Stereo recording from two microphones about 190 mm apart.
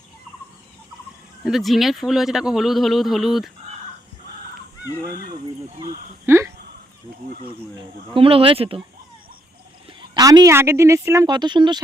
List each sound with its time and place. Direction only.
1.5 s speech: centre (ahead or behind)
6.2 s speech: 15° right (ahead or behind)
7.8 s speech: 30° right (ahead or behind)
10.2 s speech: 20° right (ahead or behind)